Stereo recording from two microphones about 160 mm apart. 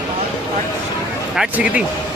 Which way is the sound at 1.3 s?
5° right (ahead or behind).